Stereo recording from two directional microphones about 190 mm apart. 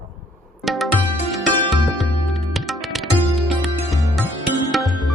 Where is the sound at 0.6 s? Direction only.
Centre (ahead or behind).